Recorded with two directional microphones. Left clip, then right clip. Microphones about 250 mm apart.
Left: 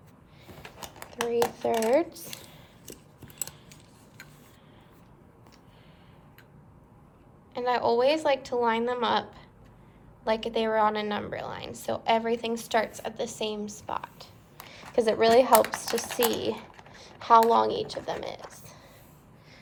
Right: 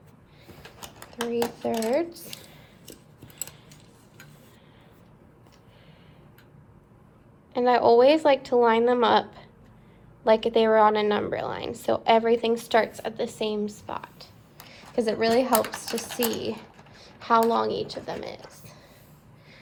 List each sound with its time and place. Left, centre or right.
1.6 s speech: left
2.2 s a sound: centre
7.5 s a woman's voice: centre; by 18.3 s left